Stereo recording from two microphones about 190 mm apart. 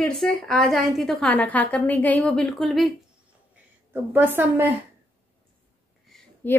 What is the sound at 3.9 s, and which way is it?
Speech, 10° right (ahead or behind).